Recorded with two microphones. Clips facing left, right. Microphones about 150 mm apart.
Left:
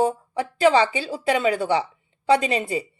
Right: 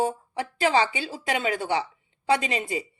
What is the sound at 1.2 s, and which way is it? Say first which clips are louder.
Speech: left 6 dB; 35° left (ahead or behind).